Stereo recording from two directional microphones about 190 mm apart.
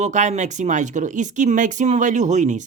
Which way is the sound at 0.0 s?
40° right (ahead or behind).